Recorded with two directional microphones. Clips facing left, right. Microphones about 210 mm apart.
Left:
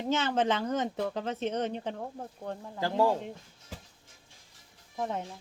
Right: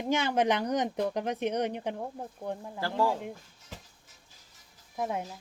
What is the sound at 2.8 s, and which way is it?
Speech, 20° left (ahead or behind).